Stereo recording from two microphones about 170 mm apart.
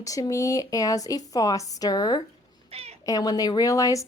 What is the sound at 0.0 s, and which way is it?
A woman's voice, 20° left (ahead or behind).